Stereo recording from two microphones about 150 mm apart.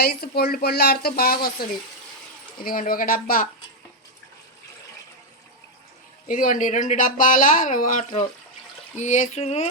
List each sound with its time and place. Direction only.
0.0 s speech: 90° left
2.6 s speech: 70° left (ahead or behind)
6.2 s speech: 60° left (ahead or behind)